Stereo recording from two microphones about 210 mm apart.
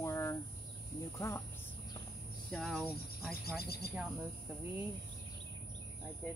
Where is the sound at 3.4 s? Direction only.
50° left (ahead or behind).